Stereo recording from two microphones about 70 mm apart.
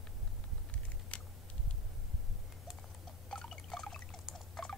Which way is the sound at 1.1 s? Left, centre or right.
Centre.